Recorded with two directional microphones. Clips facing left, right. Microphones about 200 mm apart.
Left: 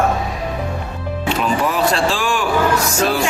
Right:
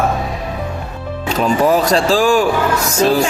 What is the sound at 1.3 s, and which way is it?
Speech, 40° right (ahead or behind).